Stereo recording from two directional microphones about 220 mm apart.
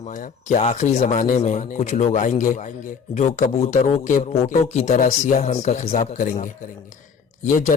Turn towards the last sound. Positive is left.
turn(degrees=35)  # may be behind; listen again after turning